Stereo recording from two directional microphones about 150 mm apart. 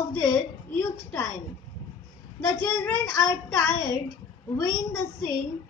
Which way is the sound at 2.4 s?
20° left (ahead or behind).